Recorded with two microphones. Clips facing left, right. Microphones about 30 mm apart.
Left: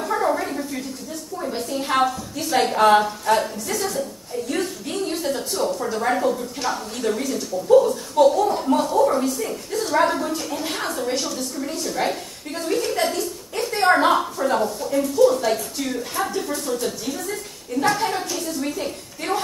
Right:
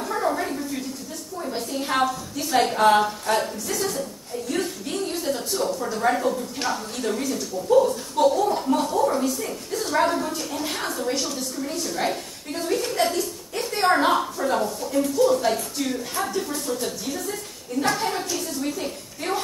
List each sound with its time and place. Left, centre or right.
0.0 s a sound: centre
1.5 s a woman's voice: centre
4.5 s a sound: centre
6.7 s a woman's voice: centre
16.2 s a woman's voice: centre
16.5 s a woman's voice: centre